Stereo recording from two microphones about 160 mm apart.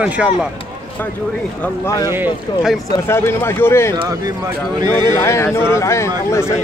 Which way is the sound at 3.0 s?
15° left (ahead or behind).